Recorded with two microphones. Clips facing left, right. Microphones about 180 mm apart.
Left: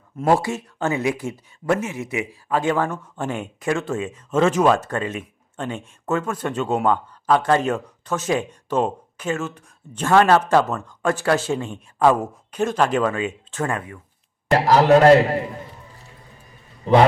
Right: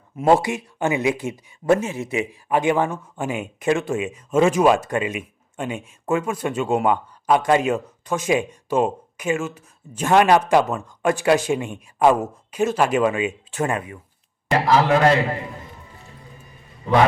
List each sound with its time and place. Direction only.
0.3 s speech: 20° right (ahead or behind)
14.7 s a man's voice: 40° left (ahead or behind)
16.8 s a man's voice: 30° left (ahead or behind)